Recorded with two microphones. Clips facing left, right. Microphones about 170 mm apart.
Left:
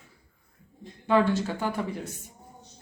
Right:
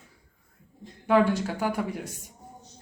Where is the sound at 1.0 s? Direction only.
10° right (ahead or behind).